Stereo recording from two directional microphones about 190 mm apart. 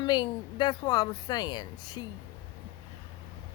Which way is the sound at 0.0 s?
20° left (ahead or behind).